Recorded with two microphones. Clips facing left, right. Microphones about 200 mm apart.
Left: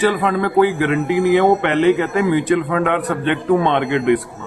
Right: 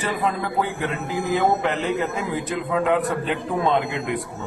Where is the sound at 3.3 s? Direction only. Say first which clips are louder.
Left 8 dB; 75° left (ahead or behind).